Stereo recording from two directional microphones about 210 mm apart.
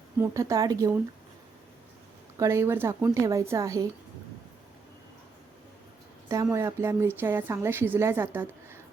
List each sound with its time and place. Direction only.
0.2 s a woman's voice: 15° right (ahead or behind)
2.4 s a woman's voice: 10° right (ahead or behind)
6.2 s a woman's voice: 15° right (ahead or behind)